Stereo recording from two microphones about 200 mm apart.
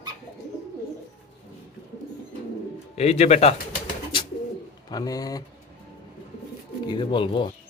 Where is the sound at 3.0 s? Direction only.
35° left (ahead or behind).